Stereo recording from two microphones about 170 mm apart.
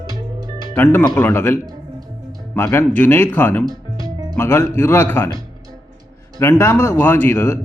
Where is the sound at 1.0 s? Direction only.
15° left (ahead or behind).